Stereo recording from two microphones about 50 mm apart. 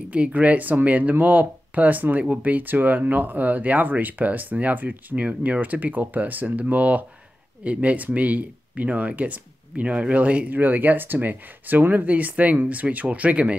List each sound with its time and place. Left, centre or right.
0.1 s speech: right